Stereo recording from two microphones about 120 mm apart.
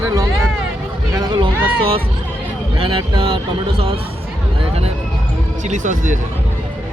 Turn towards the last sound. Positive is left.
turn(degrees=-90)